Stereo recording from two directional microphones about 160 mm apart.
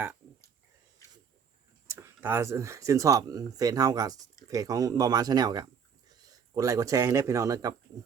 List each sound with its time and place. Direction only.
2.0 s speech: 15° right (ahead or behind)